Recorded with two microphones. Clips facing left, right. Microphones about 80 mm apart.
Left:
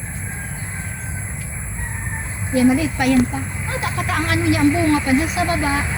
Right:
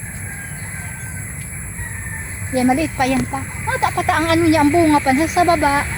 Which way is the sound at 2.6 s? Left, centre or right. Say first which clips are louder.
Even; right.